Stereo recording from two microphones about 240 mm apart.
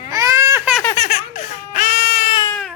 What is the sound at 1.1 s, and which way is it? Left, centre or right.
Baby cry, left.